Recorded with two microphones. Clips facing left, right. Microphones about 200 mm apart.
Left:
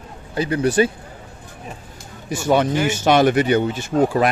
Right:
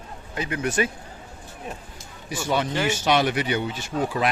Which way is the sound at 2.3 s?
45° left (ahead or behind).